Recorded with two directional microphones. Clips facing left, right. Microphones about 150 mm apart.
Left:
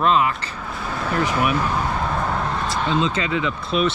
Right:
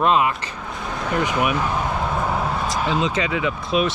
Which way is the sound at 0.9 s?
15° right (ahead or behind).